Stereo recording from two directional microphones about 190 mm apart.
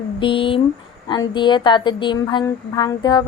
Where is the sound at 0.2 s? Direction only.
25° left (ahead or behind).